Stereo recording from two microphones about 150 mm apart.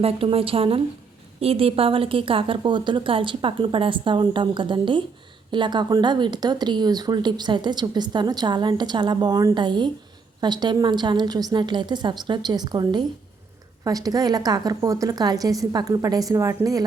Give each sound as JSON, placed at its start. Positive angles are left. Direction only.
{"t": 0.0, "sound": "a woman's voice", "side_deg": -40}